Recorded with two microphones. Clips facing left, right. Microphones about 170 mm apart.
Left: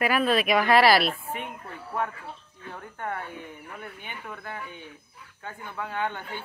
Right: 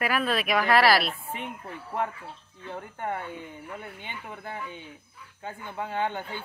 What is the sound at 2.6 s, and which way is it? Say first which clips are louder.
Speech: right 2 dB; 25° right (ahead or behind).